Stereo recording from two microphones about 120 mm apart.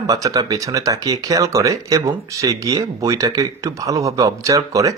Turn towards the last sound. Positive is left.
turn(degrees=-25)  # may be behind; listen again after turning